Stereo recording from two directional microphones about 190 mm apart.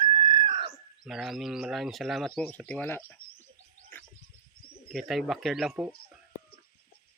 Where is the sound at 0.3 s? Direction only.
25° right (ahead or behind).